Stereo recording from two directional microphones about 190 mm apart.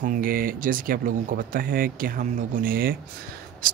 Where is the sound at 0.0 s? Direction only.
45° right (ahead or behind).